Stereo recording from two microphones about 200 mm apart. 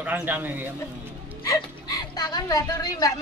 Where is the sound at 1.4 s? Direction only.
20° left (ahead or behind).